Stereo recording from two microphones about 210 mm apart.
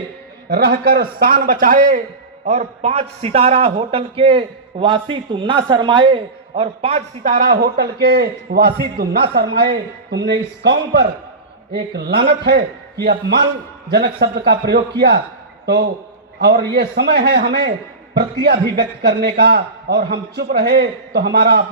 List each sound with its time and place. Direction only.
0.4 s a man's voice: 45° right (ahead or behind)